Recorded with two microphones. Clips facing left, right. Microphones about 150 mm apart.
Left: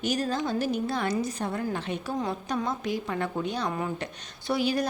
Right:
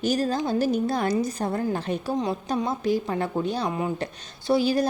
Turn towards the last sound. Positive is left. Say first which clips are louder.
# right 5 dB
turn(degrees=-30)  # may be behind; listen again after turning